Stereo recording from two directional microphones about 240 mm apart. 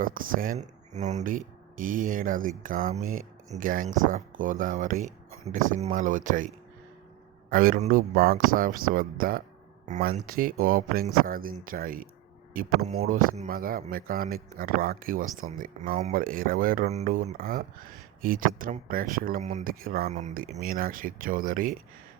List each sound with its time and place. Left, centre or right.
0.0 s speech: right
7.5 s speech: right